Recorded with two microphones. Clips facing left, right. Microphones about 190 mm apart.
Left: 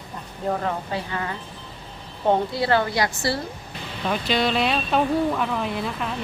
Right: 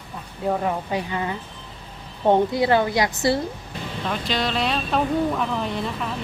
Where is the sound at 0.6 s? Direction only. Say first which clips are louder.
Right 2 dB; 15° right (ahead or behind).